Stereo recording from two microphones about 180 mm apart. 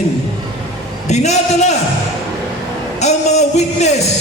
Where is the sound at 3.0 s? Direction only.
40° left (ahead or behind).